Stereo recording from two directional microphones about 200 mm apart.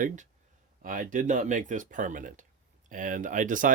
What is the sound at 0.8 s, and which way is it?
Speech, 40° right (ahead or behind).